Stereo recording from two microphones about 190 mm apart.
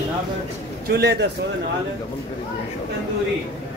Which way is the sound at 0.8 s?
55° right (ahead or behind).